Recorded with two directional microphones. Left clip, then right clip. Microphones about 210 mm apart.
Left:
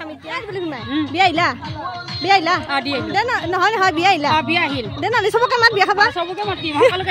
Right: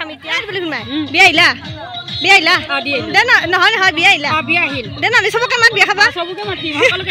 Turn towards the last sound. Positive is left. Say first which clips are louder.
# right 1 dB
turn(degrees=20)  # may be behind; listen again after turning